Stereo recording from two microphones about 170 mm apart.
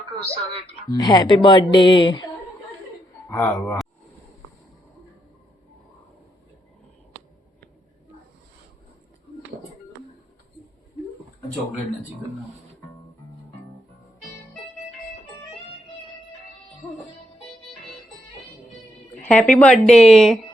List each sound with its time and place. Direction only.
0.9 s speech: 20° left (ahead or behind)
3.2 s speech: 15° left (ahead or behind)
19.2 s a woman's voice: 5° left (ahead or behind)